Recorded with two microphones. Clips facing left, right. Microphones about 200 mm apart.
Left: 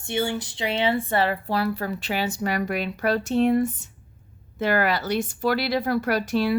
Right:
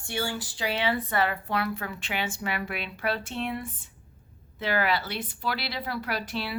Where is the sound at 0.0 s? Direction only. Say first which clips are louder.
Left 6 dB; 20° left (ahead or behind).